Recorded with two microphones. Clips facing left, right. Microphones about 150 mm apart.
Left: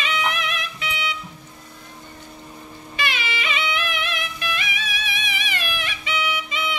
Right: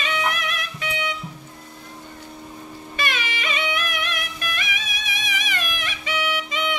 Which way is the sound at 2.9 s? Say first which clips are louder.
Even; 45° right (ahead or behind).